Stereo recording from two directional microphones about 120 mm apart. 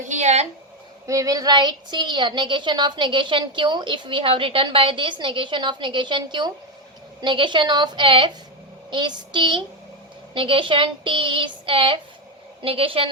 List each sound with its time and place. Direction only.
0.0 s speech: 80° right
1.0 s a woman's voice: 30° right (ahead or behind)
10.3 s child singing: 45° right (ahead or behind)